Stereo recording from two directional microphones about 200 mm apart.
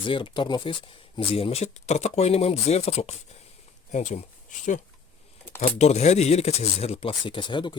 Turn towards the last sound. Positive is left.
turn(degrees=25)  # may be behind; listen again after turning